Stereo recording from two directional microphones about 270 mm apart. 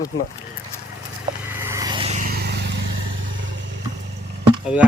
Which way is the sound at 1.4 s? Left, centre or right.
Centre.